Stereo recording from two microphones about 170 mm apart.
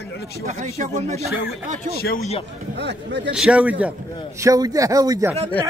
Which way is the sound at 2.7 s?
90° right.